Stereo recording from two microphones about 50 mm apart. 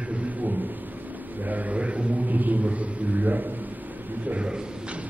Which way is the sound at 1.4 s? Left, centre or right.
Right.